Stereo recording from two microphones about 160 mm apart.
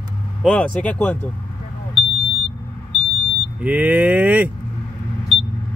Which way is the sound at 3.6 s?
10° right (ahead or behind).